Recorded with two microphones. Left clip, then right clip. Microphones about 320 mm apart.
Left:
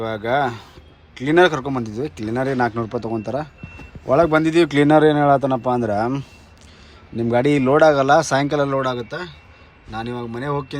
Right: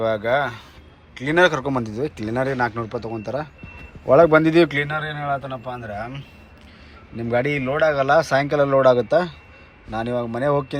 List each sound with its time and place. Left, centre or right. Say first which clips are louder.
0.0 s a man's voice: even; centre
7.2 s a man's voice: left 4 dB; centre